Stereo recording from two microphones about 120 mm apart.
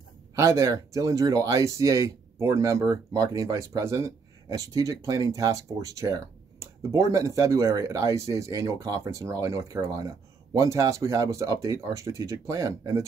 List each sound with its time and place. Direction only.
0.4 s speech: 25° right (ahead or behind)